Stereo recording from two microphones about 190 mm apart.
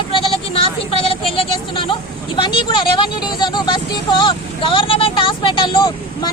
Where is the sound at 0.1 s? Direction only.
30° left (ahead or behind).